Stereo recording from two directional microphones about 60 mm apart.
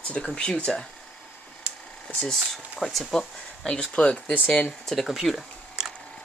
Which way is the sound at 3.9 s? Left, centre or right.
Centre.